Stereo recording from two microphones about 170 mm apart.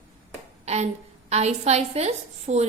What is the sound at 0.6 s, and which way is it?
A woman's voice, 40° right (ahead or behind).